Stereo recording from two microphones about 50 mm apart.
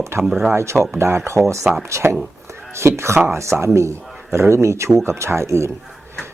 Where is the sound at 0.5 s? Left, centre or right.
Right.